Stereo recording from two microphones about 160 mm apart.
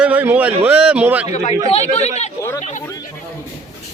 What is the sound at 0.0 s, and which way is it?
A man's voice, 10° right (ahead or behind).